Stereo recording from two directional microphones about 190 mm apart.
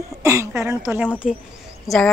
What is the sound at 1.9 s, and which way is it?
Speech, 15° left (ahead or behind).